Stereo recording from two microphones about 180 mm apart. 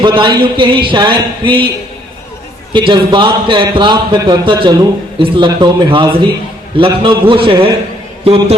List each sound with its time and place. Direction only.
0.0 s a man's voice: 25° right (ahead or behind)
2.7 s a man's voice: 25° right (ahead or behind)